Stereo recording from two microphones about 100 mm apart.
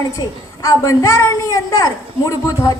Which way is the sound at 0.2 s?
35° left (ahead or behind).